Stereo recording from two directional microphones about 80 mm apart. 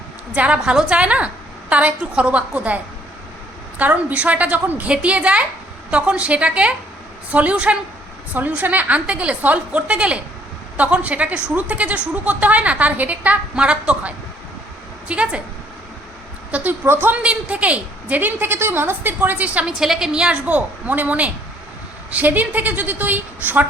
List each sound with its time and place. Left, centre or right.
0.3 s a woman's voice: centre
16.5 s a woman's voice: centre
16.8 s a woman's voice: right
17.2 s a woman's voice: centre
19.8 s a woman's voice: centre; by 23.6 s right